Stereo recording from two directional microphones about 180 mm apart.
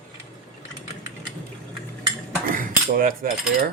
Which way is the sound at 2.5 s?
50° right (ahead or behind).